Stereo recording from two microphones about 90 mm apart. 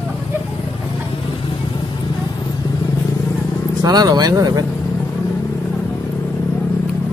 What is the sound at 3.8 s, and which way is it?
Speech, 45° right (ahead or behind).